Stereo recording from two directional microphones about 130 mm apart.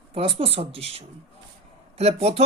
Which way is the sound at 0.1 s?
45° right (ahead or behind).